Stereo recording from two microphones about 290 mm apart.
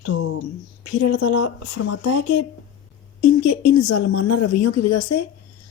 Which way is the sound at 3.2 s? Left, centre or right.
Left.